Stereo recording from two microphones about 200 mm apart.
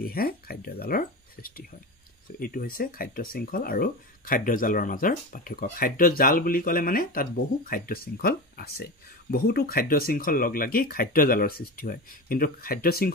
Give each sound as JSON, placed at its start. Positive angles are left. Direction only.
{"t": 0.0, "sound": "speech", "side_deg": 50}